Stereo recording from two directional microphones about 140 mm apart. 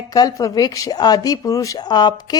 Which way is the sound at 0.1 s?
25° left (ahead or behind).